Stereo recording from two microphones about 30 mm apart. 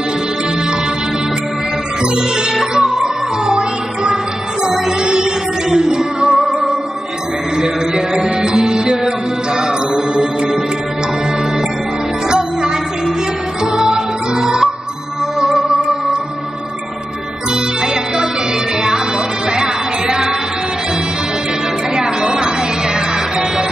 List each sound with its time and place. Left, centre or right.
2.5 s music: centre
7.5 s music: right
12.3 s music: right
13.7 s music: right
19.5 s music: right